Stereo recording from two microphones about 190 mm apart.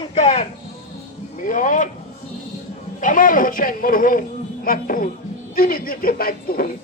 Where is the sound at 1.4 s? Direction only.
45° left (ahead or behind).